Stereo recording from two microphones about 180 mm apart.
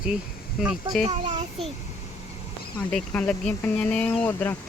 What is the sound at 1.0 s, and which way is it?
Speech, 35° right (ahead or behind).